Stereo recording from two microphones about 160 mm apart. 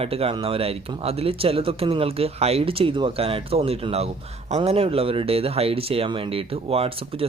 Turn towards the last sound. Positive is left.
turn(degrees=-35)  # may be behind; listen again after turning